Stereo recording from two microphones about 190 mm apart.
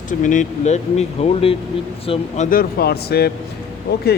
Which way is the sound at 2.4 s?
55° left (ahead or behind).